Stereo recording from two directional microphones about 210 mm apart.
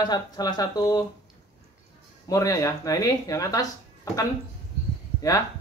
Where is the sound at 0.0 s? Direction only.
20° left (ahead or behind).